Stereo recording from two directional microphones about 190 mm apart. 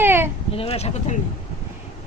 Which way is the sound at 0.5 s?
30° left (ahead or behind).